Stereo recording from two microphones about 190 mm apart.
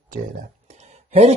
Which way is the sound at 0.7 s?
35° right (ahead or behind).